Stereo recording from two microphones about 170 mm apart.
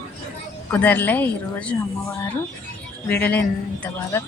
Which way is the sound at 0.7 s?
10° left (ahead or behind).